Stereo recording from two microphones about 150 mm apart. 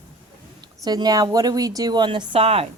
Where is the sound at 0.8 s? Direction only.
25° right (ahead or behind).